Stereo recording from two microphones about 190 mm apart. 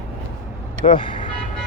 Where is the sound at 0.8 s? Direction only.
25° left (ahead or behind).